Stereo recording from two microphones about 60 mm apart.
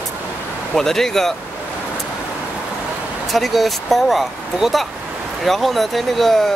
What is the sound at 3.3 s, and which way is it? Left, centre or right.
Speech, centre.